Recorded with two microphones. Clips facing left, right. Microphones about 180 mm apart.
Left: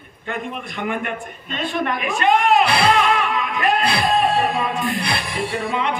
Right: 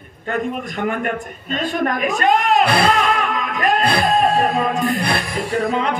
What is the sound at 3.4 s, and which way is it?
Music, 40° right (ahead or behind).